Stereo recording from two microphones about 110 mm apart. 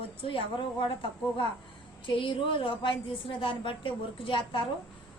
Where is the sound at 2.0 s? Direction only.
50° left (ahead or behind).